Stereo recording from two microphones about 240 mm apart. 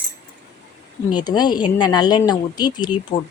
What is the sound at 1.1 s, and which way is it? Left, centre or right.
Speech, centre.